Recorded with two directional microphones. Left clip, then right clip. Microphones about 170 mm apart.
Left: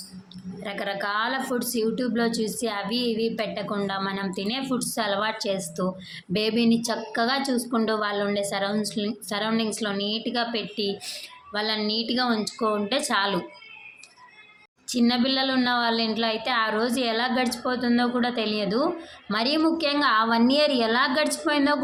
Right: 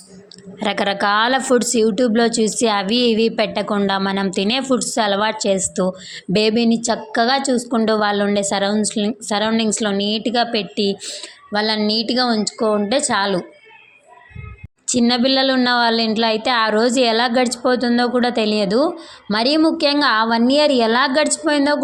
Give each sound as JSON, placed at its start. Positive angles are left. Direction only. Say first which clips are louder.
{"t": 0.6, "sound": "a woman's voice", "louder": "right 11 dB", "side_deg": -55}
{"t": 14.8, "sound": "a woman's voice", "louder": "right 7 dB", "side_deg": -45}